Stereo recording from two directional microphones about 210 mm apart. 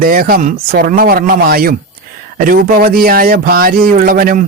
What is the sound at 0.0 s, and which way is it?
Speech, 40° right (ahead or behind).